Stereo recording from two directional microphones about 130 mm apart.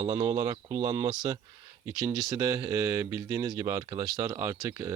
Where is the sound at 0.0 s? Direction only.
30° right (ahead or behind).